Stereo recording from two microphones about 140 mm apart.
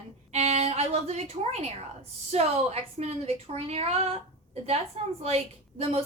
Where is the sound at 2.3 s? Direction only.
50° right (ahead or behind).